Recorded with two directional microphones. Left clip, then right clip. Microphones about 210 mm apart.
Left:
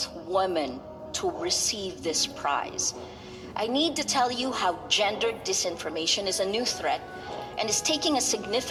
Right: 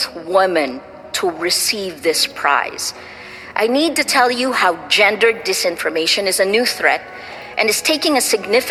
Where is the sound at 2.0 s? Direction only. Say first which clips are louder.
Right 12 dB; 55° right (ahead or behind).